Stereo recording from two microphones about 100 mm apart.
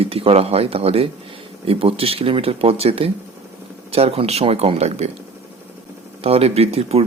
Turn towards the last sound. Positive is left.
turn(degrees=-90)